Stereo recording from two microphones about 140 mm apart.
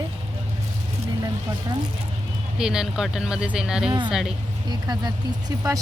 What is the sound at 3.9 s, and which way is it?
Speech, 35° right (ahead or behind).